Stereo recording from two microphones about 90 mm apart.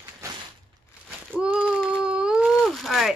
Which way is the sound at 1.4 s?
10° right (ahead or behind).